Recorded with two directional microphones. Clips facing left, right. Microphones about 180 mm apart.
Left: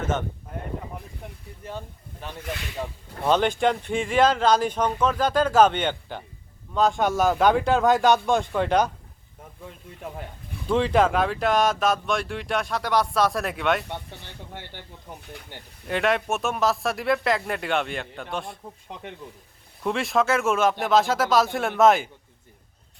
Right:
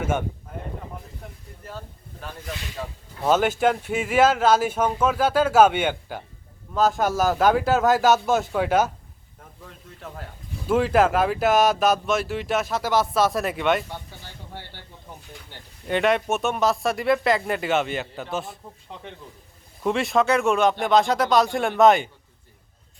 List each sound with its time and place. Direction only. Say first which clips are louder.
0.0 s speech: right 2 dB; 10° right (ahead or behind)
3.2 s speech: right 1 dB; 5° right (ahead or behind)
10.7 s speech: right 1 dB; 5° right (ahead or behind)
14.6 s speech: left 2 dB; 15° left (ahead or behind)
15.2 s speech: left 3 dB; 60° left (ahead or behind)
15.9 s speech: right 2 dB; centre (ahead or behind)
19.8 s speech: right 2 dB; centre (ahead or behind)